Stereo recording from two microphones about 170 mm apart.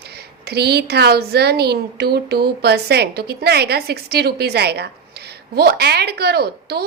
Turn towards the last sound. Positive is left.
turn(degrees=-70)  # may be behind; listen again after turning